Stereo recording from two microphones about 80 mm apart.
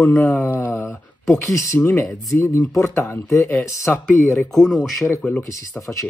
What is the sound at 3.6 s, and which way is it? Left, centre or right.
Speech, left.